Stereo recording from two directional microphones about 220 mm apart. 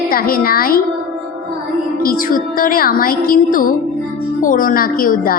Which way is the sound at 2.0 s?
40° left (ahead or behind).